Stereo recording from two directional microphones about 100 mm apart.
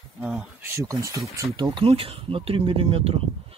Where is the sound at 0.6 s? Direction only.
30° right (ahead or behind).